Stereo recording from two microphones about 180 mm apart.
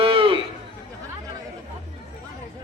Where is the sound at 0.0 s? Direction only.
30° right (ahead or behind).